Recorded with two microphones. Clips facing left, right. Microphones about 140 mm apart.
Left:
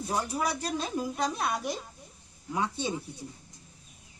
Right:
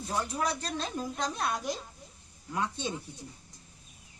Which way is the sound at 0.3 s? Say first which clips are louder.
Left 2 dB; 10° left (ahead or behind).